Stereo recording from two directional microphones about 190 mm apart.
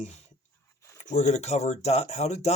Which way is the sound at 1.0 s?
40° left (ahead or behind).